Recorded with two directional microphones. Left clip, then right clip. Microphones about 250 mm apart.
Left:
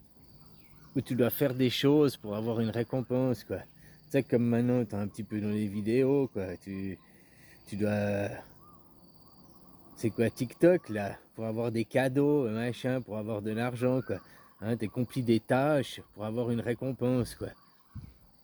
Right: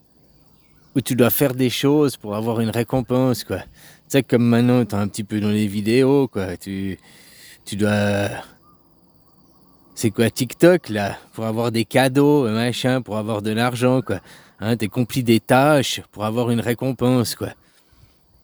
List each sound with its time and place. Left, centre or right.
0.9 s speech: right
9.9 s speech: right